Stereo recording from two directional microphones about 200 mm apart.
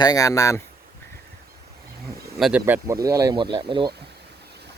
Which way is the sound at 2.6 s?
15° right (ahead or behind).